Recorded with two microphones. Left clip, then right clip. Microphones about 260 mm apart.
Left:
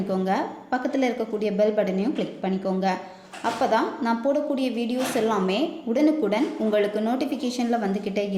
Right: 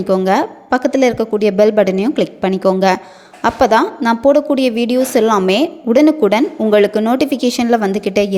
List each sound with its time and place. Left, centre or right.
0.1 s a woman's voice: right